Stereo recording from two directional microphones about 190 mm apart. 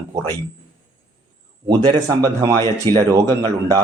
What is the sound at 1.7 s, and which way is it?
Speech, 20° right (ahead or behind).